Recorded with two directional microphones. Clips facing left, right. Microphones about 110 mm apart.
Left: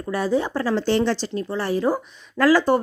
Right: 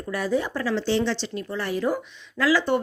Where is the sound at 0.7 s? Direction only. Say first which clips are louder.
Left 3 dB; 50° left (ahead or behind).